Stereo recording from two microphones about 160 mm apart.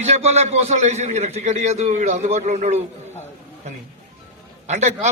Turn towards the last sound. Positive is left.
turn(degrees=-45)  # may be behind; listen again after turning